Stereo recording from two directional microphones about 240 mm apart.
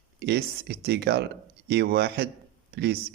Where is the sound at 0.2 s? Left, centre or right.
Right.